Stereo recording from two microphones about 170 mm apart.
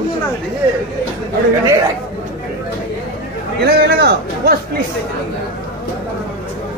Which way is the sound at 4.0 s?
65° right (ahead or behind).